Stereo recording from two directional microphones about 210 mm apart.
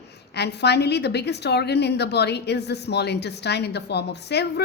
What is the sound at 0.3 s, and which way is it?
A woman's voice, 50° left (ahead or behind).